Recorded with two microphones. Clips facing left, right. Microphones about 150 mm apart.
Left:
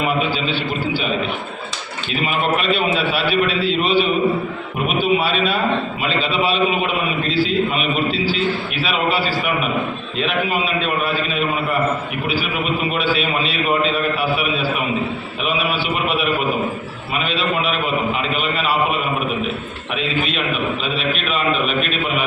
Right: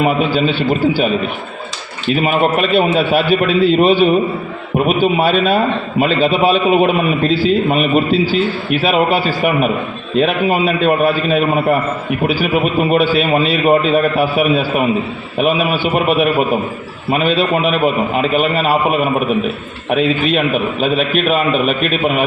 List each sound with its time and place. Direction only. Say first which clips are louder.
0.0 s a man's voice: right 6 dB; 45° right (ahead or behind)
2.2 s a man's voice: right 4 dB; 45° right (ahead or behind)
12.9 s a man's voice: right 7 dB; 45° right (ahead or behind)